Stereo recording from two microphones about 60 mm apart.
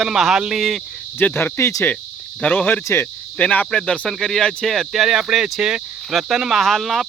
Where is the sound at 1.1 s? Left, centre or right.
Left.